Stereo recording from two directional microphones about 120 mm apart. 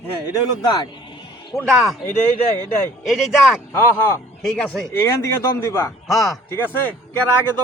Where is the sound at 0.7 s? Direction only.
35° left (ahead or behind).